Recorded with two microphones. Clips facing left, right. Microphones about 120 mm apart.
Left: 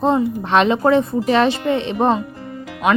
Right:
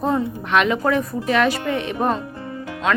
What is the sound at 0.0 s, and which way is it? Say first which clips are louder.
A woman's voice: left 4 dB; 25° left (ahead or behind).